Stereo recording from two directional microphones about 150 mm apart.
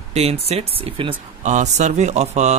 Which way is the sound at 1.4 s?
50° right (ahead or behind).